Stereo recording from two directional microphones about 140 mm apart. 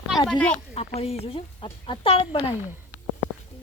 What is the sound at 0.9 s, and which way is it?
Speech, 45° left (ahead or behind).